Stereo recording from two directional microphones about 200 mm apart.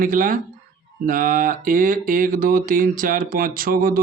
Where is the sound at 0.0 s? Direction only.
45° right (ahead or behind).